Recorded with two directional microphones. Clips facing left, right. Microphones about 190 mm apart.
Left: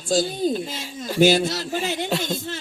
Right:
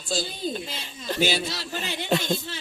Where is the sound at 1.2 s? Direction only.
45° left (ahead or behind).